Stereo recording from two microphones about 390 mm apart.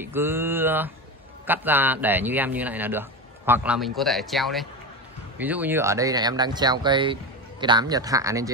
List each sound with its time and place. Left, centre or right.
0.0 s a man's voice: centre